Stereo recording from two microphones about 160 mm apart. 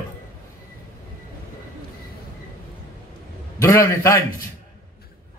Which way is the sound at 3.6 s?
20° left (ahead or behind).